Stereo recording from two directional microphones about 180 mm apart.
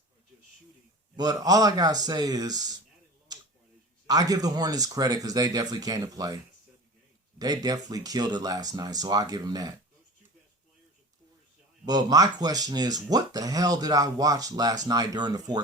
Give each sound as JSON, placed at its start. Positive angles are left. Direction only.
{"t": 1.1, "sound": "speech", "side_deg": -20}
{"t": 4.0, "sound": "speech", "side_deg": -20}
{"t": 7.3, "sound": "speech", "side_deg": -20}
{"t": 11.9, "sound": "speech", "side_deg": -20}